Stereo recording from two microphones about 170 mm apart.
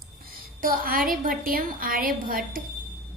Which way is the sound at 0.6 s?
55° right (ahead or behind).